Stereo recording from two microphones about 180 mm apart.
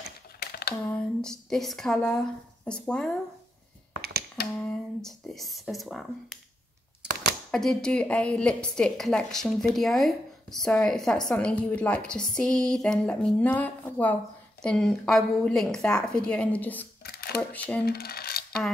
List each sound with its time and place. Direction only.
0.4 s a sound: 60° left (ahead or behind)
0.8 s speech: 5° left (ahead or behind)
4.6 s a woman's voice: 5° left (ahead or behind)
7.5 s a woman's voice: 5° left (ahead or behind)
17.0 s shuffling cards: 60° left (ahead or behind)
17.4 s speech: 10° left (ahead or behind)
17.8 s speech: 60° left (ahead or behind)